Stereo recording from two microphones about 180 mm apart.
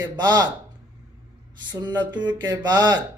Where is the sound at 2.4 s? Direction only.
25° right (ahead or behind).